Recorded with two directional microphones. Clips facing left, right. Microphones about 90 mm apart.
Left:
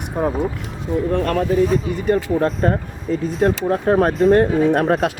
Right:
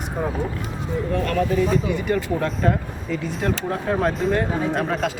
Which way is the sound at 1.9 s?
35° left (ahead or behind).